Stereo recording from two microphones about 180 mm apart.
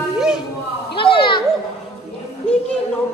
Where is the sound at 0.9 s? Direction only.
30° left (ahead or behind).